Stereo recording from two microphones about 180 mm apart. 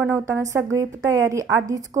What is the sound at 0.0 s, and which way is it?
A woman's voice, 15° right (ahead or behind).